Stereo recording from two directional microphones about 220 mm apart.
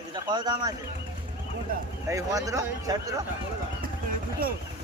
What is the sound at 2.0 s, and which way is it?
Speech, 15° right (ahead or behind).